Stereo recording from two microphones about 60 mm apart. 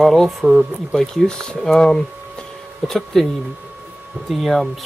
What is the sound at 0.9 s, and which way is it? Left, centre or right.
Speech, centre.